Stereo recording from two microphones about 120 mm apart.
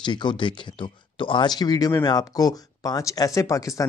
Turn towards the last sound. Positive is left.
turn(degrees=30)  # may be behind; listen again after turning